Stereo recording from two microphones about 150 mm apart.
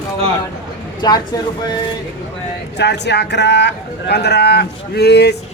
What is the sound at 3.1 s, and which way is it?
Speech, 90° left.